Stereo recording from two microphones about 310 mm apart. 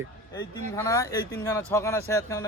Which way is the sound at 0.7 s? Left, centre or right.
Centre.